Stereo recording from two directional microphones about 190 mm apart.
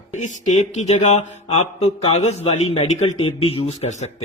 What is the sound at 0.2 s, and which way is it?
Speech, 40° left (ahead or behind).